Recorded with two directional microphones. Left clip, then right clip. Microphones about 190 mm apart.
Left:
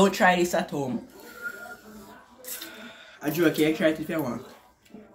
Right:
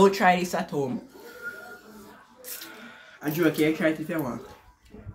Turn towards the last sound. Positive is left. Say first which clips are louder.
# left 1 dB
turn(degrees=-5)  # may be behind; listen again after turning